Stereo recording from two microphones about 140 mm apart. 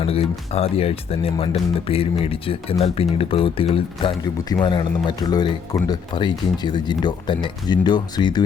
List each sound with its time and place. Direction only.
0.0 s speech: 45° left (ahead or behind)